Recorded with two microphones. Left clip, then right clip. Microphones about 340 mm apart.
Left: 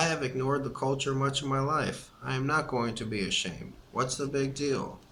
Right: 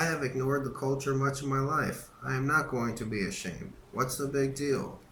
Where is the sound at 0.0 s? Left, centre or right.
Centre.